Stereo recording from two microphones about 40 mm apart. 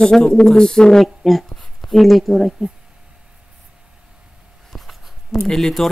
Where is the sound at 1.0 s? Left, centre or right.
Centre.